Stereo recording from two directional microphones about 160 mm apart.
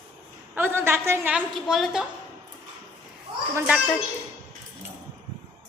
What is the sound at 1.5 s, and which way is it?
Speech, centre (ahead or behind).